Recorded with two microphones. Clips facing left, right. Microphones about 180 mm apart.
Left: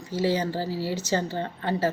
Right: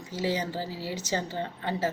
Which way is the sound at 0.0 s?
20° right (ahead or behind).